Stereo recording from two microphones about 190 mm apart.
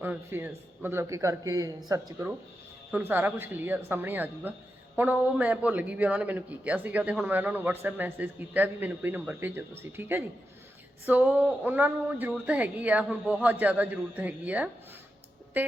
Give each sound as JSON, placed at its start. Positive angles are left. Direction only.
{"t": 0.0, "sound": "a man's voice", "side_deg": -10}